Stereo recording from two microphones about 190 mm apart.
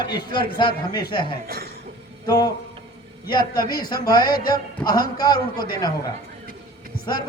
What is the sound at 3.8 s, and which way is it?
A man's voice, 20° left (ahead or behind).